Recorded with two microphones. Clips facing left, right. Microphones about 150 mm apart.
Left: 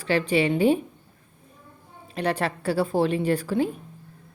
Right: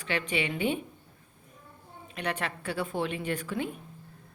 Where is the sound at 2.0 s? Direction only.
35° left (ahead or behind).